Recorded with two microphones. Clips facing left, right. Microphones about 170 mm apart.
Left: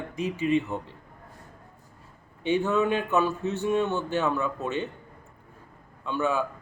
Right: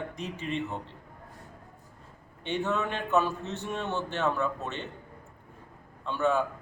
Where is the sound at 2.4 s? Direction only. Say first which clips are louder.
Left 6 dB; 5° left (ahead or behind).